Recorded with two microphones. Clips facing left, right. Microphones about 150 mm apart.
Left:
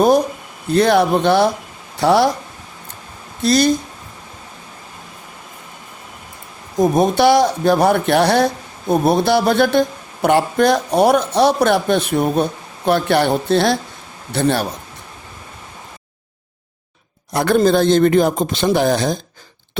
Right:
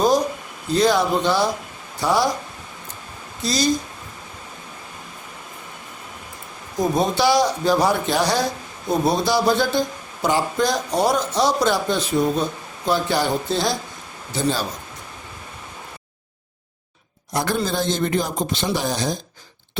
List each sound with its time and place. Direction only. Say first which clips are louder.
0.7 s speech: left 4 dB; 60° left (ahead or behind)
3.4 s speech: left 8 dB; 60° left (ahead or behind)
6.9 s speech: left 5 dB; 55° left (ahead or behind)
17.3 s speech: left 8 dB; 60° left (ahead or behind)